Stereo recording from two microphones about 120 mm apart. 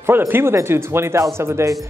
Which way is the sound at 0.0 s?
20° right (ahead or behind).